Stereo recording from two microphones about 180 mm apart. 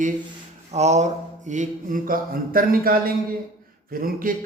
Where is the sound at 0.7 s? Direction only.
40° right (ahead or behind).